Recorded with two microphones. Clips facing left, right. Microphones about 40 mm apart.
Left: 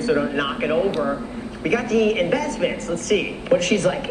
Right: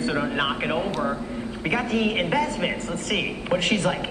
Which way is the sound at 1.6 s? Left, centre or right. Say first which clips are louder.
Left 5 dB; right.